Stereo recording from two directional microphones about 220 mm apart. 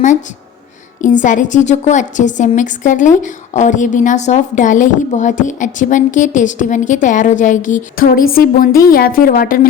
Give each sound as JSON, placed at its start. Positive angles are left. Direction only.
{"t": 1.0, "sound": "a woman's voice", "side_deg": 35}